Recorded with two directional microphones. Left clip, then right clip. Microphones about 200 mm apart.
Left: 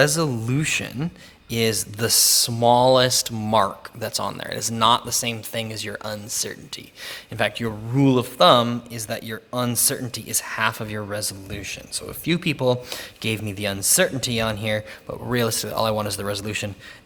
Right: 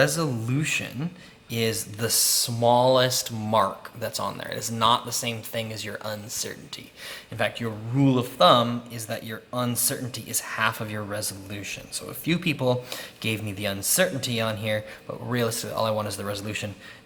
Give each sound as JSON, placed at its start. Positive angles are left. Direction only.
{"t": 0.0, "sound": "speech", "side_deg": 50}